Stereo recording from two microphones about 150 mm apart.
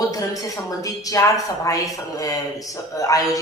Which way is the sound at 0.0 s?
25° left (ahead or behind).